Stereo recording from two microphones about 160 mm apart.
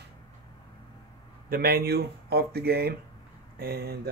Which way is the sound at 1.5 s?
70° right (ahead or behind).